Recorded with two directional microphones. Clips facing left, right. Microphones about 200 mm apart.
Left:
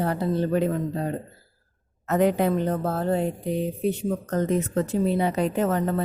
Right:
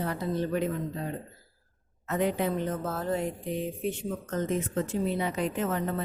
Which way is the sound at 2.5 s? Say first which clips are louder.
Left 6 dB; 35° left (ahead or behind).